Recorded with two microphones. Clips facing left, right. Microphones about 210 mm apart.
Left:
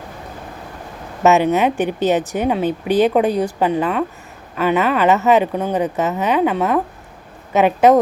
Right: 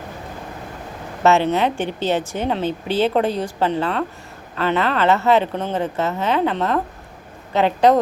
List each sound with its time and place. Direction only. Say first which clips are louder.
1.2 s a woman's voice: left 3 dB; 15° left (ahead or behind)